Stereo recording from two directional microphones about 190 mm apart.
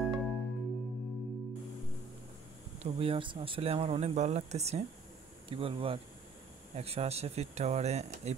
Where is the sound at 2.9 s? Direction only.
30° right (ahead or behind).